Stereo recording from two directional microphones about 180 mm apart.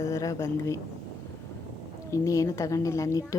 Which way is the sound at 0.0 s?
15° left (ahead or behind).